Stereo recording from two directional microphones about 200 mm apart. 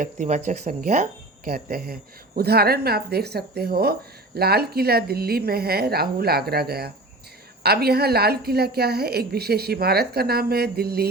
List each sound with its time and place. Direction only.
0.0 s a woman's voice: 40° right (ahead or behind)